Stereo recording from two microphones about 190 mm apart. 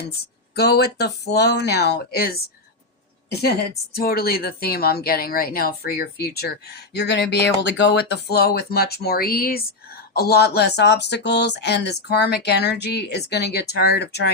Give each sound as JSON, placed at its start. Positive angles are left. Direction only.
{"t": 0.5, "sound": "speech", "side_deg": 60}
{"t": 3.9, "sound": "speech", "side_deg": 50}